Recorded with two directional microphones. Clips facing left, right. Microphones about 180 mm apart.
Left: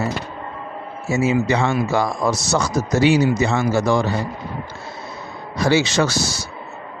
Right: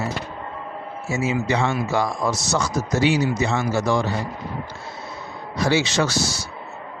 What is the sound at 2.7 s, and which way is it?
Speech, 85° left.